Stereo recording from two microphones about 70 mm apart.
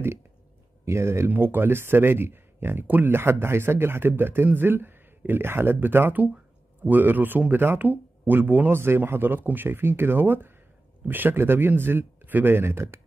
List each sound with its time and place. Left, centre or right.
0.8 s speech: right